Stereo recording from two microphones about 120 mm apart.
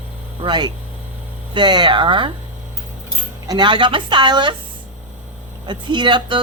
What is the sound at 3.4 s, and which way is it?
Speech, 35° right (ahead or behind).